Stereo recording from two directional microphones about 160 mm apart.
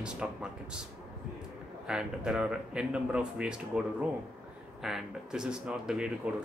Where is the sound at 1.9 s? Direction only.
5° right (ahead or behind).